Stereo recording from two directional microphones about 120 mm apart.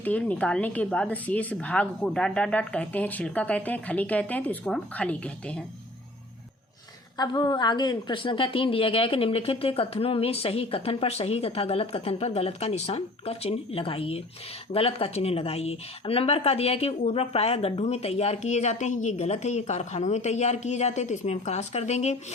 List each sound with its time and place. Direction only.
0.0 s speech: 10° left (ahead or behind)
7.2 s a woman's voice: 40° left (ahead or behind); by 19.1 s 90° left
19.1 s a woman's voice: 70° left (ahead or behind)